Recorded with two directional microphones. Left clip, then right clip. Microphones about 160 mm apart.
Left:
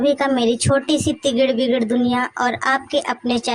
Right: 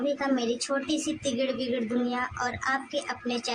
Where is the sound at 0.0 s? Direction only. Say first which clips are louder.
Left 11 dB; 45° left (ahead or behind).